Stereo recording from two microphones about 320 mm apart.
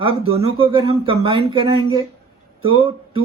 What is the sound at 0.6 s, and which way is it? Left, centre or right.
Speech, centre.